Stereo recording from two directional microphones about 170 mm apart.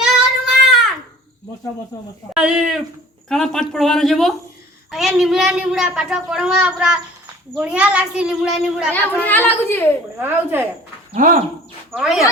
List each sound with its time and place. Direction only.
0.0 s child singing: centre (ahead or behind)
2.3 s a child's voice: 5° right (ahead or behind)
8.9 s a child's voice: 10° left (ahead or behind)
10.2 s speech: 10° right (ahead or behind)
11.1 s speech: 50° right (ahead or behind)
11.9 s a child's voice: centre (ahead or behind)